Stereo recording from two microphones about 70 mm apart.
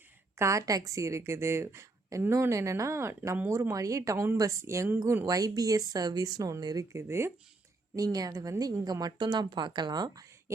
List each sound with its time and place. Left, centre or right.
0.3 s a woman's voice: right
5.2 s speech: right
6.7 s speech: right
7.9 s speech: right